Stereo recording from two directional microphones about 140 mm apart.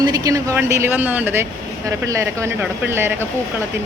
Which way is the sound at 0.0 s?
25° right (ahead or behind).